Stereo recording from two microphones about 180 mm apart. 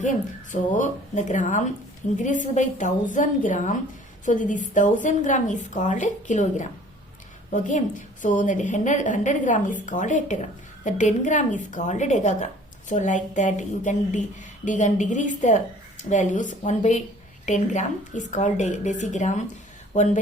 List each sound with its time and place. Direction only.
0.5 s a woman's voice: 45° left (ahead or behind)